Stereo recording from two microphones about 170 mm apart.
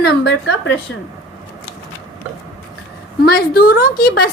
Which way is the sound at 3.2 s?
65° left (ahead or behind).